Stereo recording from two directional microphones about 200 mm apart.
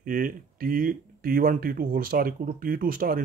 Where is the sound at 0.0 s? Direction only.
45° right (ahead or behind).